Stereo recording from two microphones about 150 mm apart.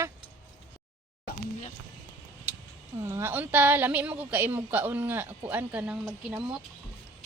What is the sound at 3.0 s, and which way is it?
A woman's voice, 15° right (ahead or behind).